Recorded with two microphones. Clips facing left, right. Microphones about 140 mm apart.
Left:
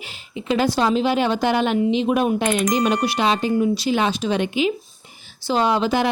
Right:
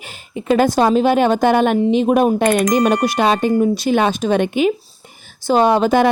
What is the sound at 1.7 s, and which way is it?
Speech, 35° right (ahead or behind).